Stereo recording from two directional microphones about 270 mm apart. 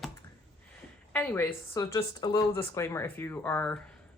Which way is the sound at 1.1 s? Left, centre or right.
Centre.